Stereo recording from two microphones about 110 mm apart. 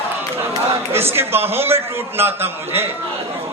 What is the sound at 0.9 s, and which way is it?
A man's voice, 20° right (ahead or behind).